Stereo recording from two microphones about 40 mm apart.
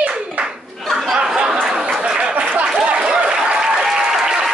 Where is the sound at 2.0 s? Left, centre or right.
Right.